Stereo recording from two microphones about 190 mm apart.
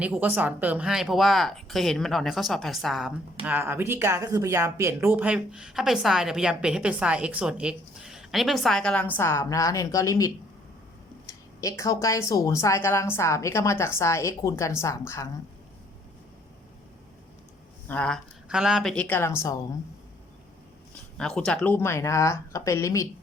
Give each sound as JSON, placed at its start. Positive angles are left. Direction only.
{"t": 0.0, "sound": "a woman's voice", "side_deg": -10}
{"t": 17.8, "sound": "a woman's voice", "side_deg": 5}
{"t": 18.4, "sound": "a woman's voice", "side_deg": -5}
{"t": 21.2, "sound": "a woman's voice", "side_deg": 5}